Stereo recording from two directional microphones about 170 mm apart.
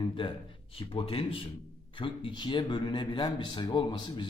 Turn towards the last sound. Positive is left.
turn(degrees=30)  # may be behind; listen again after turning